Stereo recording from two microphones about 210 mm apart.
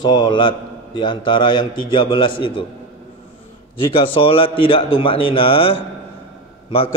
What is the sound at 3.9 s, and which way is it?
A man's voice, 25° left (ahead or behind).